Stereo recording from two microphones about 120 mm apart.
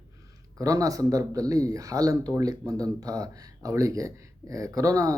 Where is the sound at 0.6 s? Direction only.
30° right (ahead or behind).